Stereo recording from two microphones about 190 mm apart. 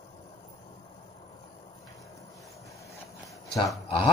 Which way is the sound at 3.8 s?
30° left (ahead or behind).